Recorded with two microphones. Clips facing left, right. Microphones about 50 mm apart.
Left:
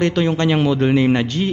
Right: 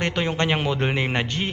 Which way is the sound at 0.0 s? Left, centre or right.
Centre.